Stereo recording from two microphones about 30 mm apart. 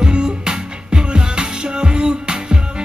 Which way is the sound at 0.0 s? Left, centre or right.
Right.